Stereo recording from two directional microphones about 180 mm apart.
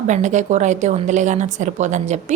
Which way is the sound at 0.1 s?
40° right (ahead or behind).